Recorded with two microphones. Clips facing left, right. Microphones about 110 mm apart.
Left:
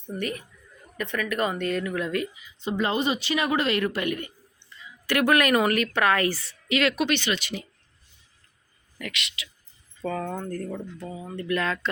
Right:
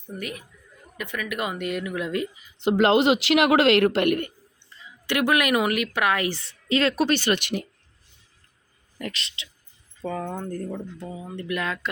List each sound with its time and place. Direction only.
0.1 s a woman's voice: 5° right (ahead or behind)
2.6 s speech: 80° right; by 4.3 s 65° right (ahead or behind)
5.0 s a woman's voice: 15° right (ahead or behind)
6.4 s speech: 30° right (ahead or behind); by 7.7 s 55° right (ahead or behind)
9.0 s speech: 35° right (ahead or behind)
10.0 s a woman's voice: 5° right (ahead or behind)